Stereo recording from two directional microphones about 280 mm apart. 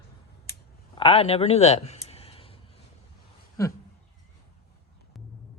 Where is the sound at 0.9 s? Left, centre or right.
Centre.